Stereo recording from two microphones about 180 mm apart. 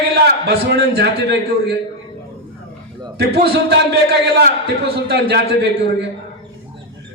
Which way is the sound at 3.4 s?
70° right (ahead or behind).